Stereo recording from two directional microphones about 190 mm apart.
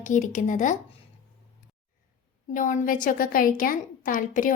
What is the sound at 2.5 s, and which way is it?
A woman's voice, 45° left (ahead or behind).